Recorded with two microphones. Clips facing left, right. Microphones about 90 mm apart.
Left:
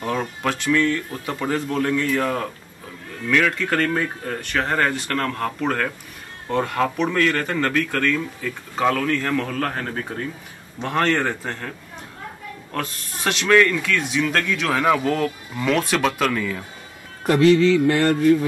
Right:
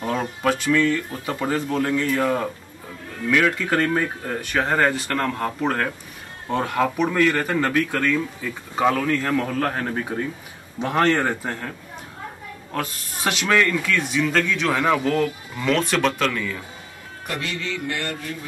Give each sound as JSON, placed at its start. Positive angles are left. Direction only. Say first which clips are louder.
{"t": 0.4, "sound": "speech", "louder": "right 1 dB", "side_deg": -5}
{"t": 12.7, "sound": "speech", "louder": "right 1 dB", "side_deg": -5}
{"t": 17.3, "sound": "music", "louder": "left 15 dB", "side_deg": 35}